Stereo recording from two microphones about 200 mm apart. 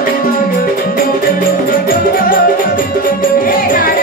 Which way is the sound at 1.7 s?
45° left (ahead or behind).